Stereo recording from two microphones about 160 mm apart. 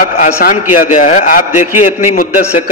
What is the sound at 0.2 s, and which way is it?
A man's voice, 55° left (ahead or behind).